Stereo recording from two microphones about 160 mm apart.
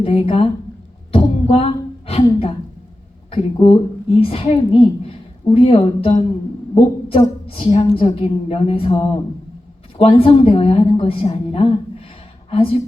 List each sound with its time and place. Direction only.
0.0 s a woman's voice: 35° left (ahead or behind)
1.1 s a sound: 35° left (ahead or behind)
3.3 s a woman's voice: 35° left (ahead or behind)
7.4 s a woman's voice: 35° left (ahead or behind)